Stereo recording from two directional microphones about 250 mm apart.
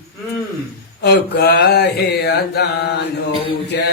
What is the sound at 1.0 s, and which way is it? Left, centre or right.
Mantra, left.